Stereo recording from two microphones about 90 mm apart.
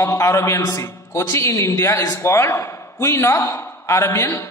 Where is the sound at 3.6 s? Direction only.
25° left (ahead or behind).